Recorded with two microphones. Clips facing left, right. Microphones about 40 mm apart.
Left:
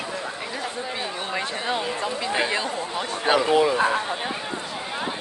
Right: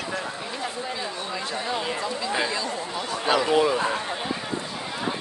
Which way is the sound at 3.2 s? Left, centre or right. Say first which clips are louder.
Left 2 dB; left.